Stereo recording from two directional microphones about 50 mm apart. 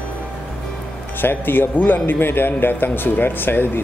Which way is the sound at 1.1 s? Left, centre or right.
Left.